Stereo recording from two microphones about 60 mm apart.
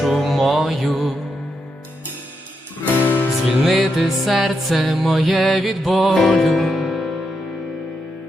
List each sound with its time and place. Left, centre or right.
0.0 s music: centre
2.8 s music: left
3.7 s music: centre